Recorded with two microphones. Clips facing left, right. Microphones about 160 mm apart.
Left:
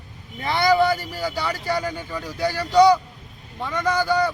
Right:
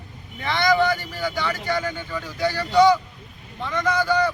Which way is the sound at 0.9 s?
35° left (ahead or behind).